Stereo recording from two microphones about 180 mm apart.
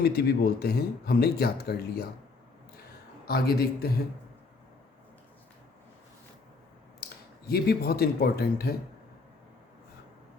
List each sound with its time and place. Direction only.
0.0 s speech: 60° left (ahead or behind)
3.2 s speech: 60° left (ahead or behind)
7.0 s a sound: 55° left (ahead or behind)
7.4 s speech: 60° left (ahead or behind)